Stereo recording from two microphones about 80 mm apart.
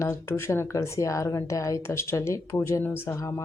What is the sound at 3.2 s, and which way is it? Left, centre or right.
Speech, left.